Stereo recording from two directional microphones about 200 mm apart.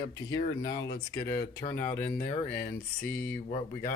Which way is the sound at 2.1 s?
40° left (ahead or behind).